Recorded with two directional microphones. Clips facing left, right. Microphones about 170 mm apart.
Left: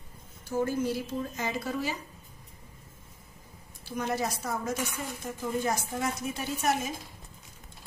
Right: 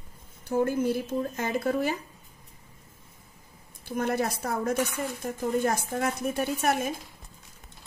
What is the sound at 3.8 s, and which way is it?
Speech, 55° right (ahead or behind).